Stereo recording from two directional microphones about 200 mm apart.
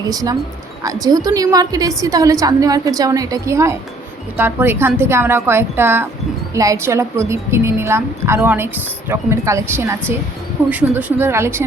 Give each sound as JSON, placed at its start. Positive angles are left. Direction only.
{"t": 0.1, "sound": "a woman's voice", "side_deg": -20}